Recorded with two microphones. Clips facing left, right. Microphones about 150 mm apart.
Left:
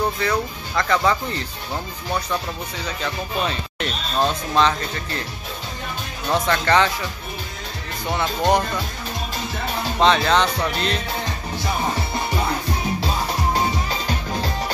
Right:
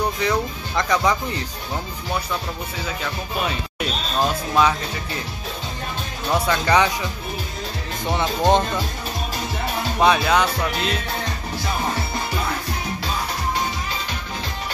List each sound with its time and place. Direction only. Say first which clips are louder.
0.2 s speech: right 1 dB; 20° right (ahead or behind)
3.0 s speech: left 3 dB; 5° right (ahead or behind)
6.3 s speech: even; 10° right (ahead or behind)
8.1 s speech: right 1 dB; 10° right (ahead or behind)
9.9 s speech: even; 10° right (ahead or behind)